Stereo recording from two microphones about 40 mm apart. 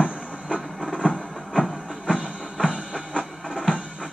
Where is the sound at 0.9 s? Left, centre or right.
Left.